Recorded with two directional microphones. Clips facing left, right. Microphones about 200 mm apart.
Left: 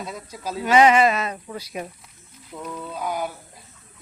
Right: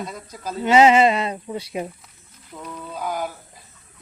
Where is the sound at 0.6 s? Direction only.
25° right (ahead or behind).